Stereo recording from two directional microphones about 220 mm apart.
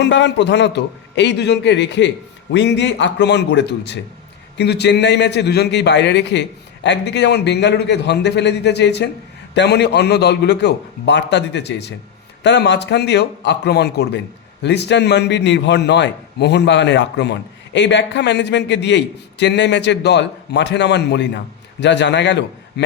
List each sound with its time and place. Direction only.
0.0 s a man's voice: 55° left (ahead or behind)